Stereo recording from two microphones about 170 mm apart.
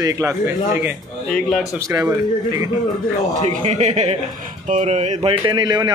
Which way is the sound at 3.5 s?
45° right (ahead or behind).